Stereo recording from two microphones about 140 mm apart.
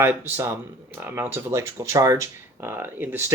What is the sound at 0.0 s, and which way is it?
Speech, 15° right (ahead or behind).